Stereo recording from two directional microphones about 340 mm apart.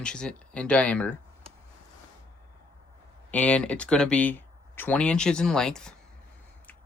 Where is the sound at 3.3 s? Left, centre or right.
Centre.